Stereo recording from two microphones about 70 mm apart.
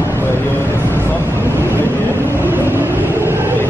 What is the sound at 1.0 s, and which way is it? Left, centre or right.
Vehicle, right.